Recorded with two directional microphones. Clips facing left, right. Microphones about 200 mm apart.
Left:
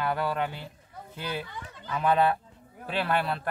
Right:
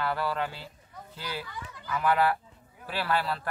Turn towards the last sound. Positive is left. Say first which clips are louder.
# left 2 dB
turn(degrees=20)  # may be behind; listen again after turning